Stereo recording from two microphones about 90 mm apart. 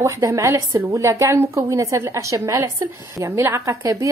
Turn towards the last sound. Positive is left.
turn(degrees=-35)  # may be behind; listen again after turning